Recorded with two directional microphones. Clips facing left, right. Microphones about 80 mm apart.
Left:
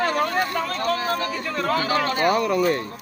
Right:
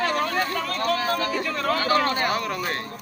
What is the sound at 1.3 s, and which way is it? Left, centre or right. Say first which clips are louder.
Speech: even; centre.